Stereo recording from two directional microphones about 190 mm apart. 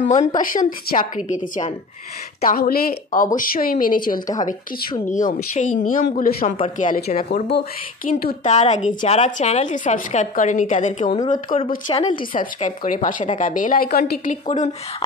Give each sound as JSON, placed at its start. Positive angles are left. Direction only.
{"t": 0.1, "sound": "a woman's voice", "side_deg": 40}
{"t": 2.4, "sound": "a woman's voice", "side_deg": 50}
{"t": 11.2, "sound": "speech", "side_deg": 30}
{"t": 12.4, "sound": "a woman's voice", "side_deg": 45}